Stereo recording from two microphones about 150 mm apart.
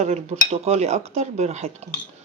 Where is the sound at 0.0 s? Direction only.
45° right (ahead or behind).